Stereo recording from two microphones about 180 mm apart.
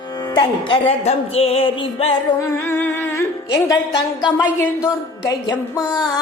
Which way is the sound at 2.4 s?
15° left (ahead or behind).